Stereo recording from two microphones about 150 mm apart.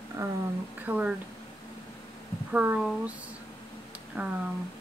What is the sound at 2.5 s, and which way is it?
Speech, 10° right (ahead or behind).